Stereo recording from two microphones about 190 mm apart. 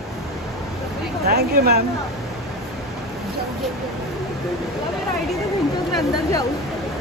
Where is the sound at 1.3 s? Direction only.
55° right (ahead or behind).